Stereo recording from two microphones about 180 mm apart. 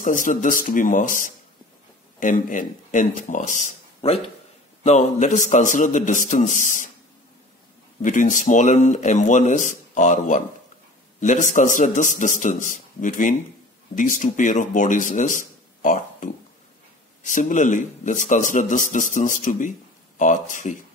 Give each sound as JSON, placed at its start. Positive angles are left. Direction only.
{"t": 0.0, "sound": "a man's voice", "side_deg": 45}
{"t": 8.0, "sound": "a man's voice", "side_deg": 45}